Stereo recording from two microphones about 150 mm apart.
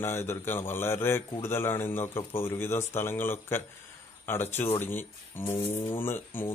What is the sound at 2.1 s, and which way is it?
Speech, 35° left (ahead or behind).